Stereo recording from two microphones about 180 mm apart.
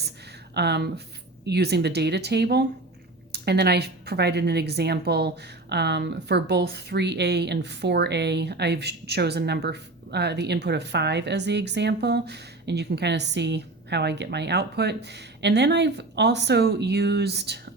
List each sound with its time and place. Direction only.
0.5 s a woman's voice: 65° right (ahead or behind)